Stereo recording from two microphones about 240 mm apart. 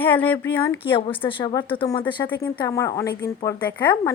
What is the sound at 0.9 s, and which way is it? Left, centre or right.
A woman's voice, left.